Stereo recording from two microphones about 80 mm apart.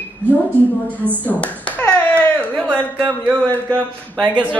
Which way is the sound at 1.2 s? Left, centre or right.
Centre.